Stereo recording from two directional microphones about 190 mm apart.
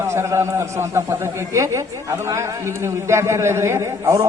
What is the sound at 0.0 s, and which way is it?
A man's voice, 15° right (ahead or behind).